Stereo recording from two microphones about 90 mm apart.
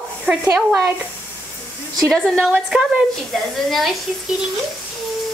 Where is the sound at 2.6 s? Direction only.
5° right (ahead or behind).